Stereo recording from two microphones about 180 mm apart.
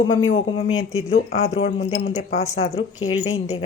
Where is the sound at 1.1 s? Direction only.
40° left (ahead or behind).